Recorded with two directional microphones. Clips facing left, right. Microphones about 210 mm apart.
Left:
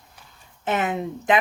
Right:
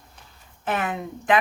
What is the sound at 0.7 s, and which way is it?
Speech, 20° left (ahead or behind).